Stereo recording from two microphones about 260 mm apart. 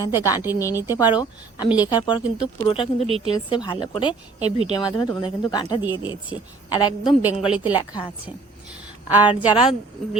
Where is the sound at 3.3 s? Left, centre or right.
Centre.